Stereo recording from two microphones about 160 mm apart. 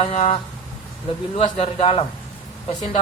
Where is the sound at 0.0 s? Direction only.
40° left (ahead or behind).